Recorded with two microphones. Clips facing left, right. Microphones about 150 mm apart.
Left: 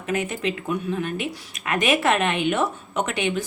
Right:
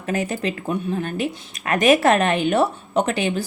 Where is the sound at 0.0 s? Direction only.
35° right (ahead or behind).